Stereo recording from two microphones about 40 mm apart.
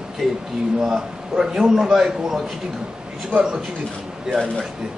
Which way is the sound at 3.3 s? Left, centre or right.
Right.